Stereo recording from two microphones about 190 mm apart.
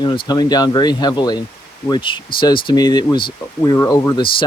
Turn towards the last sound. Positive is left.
turn(degrees=20)  # may be behind; listen again after turning